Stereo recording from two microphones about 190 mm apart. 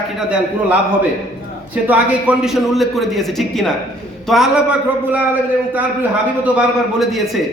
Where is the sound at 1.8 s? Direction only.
5° right (ahead or behind).